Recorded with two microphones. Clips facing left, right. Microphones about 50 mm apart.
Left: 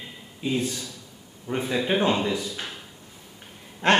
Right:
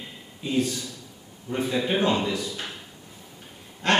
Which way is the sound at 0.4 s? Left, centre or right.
Centre.